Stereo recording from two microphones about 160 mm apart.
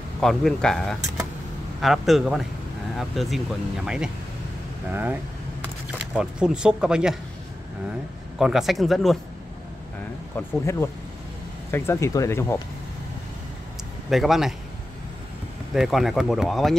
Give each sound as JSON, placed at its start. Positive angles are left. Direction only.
{"t": 0.2, "sound": "speech", "side_deg": 0}
{"t": 8.4, "sound": "speech", "side_deg": 0}
{"t": 10.3, "sound": "speech", "side_deg": 15}
{"t": 14.1, "sound": "speech", "side_deg": 0}
{"t": 15.7, "sound": "speech", "side_deg": 0}